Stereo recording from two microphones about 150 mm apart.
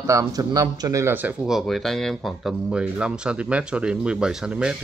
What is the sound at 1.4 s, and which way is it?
Speech, centre (ahead or behind).